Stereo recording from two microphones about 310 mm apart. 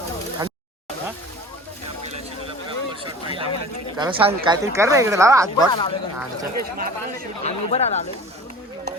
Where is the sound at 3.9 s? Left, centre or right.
Centre.